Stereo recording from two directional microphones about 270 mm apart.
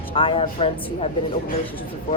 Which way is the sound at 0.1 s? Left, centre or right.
Centre.